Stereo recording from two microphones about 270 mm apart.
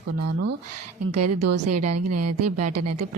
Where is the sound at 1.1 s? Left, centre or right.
Right.